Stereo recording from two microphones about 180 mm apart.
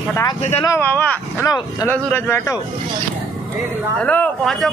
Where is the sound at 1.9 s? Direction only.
10° left (ahead or behind).